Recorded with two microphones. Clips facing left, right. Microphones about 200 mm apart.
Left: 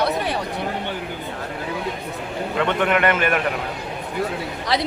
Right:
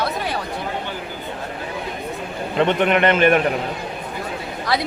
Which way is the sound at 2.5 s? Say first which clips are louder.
Right 3 dB; 25° right (ahead or behind).